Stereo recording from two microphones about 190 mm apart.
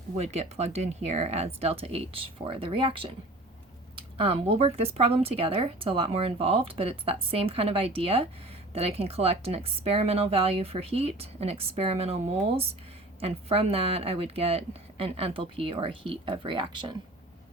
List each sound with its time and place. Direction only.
0.2 s a woman's voice: 35° right (ahead or behind)